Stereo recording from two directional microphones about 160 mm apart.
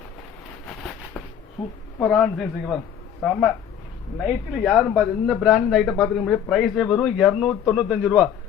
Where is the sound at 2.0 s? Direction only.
5° left (ahead or behind).